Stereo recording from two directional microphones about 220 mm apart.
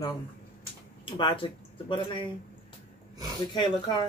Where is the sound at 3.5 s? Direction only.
20° left (ahead or behind).